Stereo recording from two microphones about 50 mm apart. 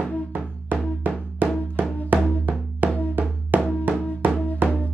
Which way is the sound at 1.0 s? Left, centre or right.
Right.